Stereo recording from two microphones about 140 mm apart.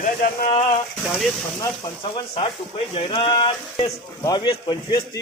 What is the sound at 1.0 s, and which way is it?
Speech, centre (ahead or behind).